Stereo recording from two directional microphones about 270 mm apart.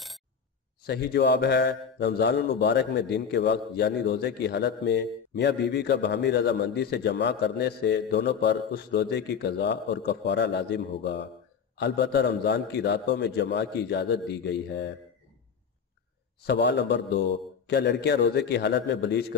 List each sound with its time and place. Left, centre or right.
0.8 s speech: left
16.4 s speech: left